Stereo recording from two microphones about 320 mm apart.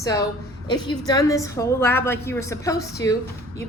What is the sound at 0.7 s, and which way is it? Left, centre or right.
A woman's voice, centre.